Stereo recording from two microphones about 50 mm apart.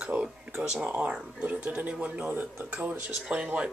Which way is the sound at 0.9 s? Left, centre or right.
Right.